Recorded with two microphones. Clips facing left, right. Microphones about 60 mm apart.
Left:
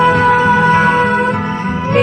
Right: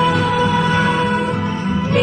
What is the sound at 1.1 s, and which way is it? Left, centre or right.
Music, left.